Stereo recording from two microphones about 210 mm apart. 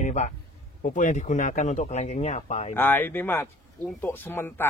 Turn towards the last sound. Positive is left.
turn(degrees=10)  # may be behind; listen again after turning